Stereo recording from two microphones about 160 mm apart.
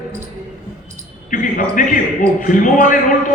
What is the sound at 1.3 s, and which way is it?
A man's voice, 55° left (ahead or behind).